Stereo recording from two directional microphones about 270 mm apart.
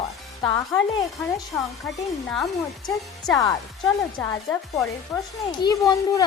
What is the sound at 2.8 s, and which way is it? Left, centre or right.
A woman's voice, centre.